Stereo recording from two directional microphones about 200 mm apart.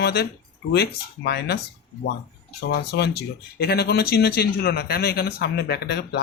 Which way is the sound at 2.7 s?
55° left (ahead or behind).